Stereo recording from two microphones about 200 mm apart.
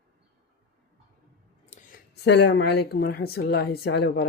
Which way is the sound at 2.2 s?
60° left (ahead or behind).